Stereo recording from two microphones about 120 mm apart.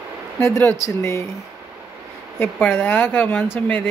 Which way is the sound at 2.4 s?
15° left (ahead or behind).